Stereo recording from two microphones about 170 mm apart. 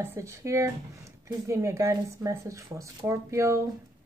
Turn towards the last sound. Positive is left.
turn(degrees=-20)  # may be behind; listen again after turning